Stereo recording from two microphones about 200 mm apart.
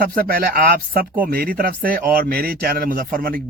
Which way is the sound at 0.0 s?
45° right (ahead or behind).